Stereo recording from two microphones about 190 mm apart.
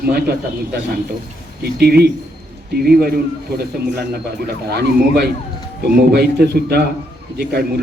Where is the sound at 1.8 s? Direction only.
55° right (ahead or behind).